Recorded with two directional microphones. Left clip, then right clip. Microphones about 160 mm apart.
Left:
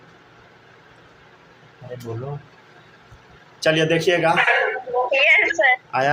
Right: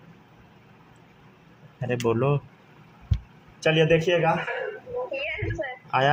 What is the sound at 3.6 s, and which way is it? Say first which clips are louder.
Speech: left 3 dB; 10° right (ahead or behind).